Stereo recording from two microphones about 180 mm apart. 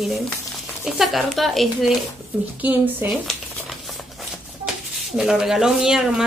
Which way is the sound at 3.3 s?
Centre (ahead or behind).